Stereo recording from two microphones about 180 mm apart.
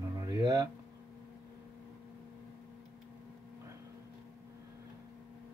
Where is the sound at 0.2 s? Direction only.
20° right (ahead or behind).